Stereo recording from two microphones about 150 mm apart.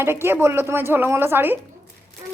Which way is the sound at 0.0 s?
15° right (ahead or behind).